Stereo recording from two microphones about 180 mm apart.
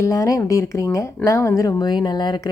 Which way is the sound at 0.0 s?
20° left (ahead or behind).